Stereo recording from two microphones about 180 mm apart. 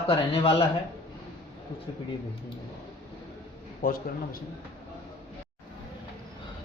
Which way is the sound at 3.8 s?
50° left (ahead or behind).